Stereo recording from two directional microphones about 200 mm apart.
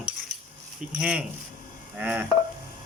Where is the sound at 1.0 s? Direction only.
5° right (ahead or behind).